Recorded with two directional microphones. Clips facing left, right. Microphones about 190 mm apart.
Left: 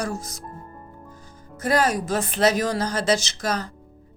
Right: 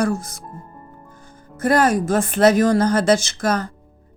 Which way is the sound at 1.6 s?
50° right (ahead or behind).